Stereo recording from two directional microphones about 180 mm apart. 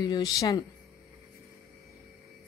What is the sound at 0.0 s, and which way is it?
Speech, 25° left (ahead or behind).